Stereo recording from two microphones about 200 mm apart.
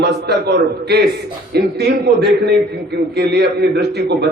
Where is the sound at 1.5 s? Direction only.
55° right (ahead or behind).